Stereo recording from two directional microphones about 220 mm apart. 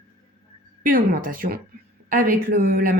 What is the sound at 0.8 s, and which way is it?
Speech, 40° right (ahead or behind).